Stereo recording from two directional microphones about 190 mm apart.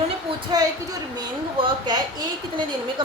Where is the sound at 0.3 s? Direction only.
20° right (ahead or behind).